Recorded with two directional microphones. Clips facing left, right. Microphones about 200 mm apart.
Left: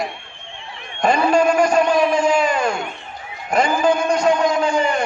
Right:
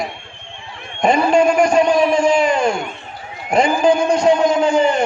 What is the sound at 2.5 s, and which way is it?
Speech, 25° right (ahead or behind).